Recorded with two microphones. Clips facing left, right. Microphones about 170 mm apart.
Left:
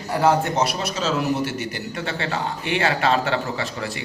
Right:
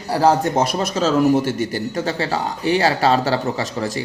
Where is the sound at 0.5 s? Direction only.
50° right (ahead or behind).